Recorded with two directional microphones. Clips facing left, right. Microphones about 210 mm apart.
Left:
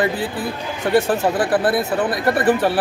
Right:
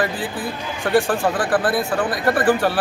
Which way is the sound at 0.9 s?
20° left (ahead or behind).